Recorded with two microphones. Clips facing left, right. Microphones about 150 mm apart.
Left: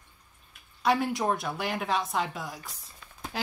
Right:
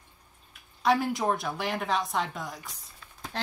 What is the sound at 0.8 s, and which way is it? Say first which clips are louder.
Speech: right 1 dB; centre (ahead or behind).